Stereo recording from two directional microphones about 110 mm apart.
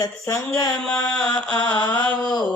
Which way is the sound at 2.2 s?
40° left (ahead or behind).